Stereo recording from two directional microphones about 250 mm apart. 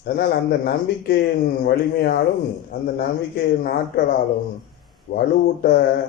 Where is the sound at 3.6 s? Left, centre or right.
Left.